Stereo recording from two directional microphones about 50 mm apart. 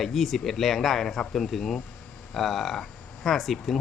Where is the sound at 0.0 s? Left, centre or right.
Centre.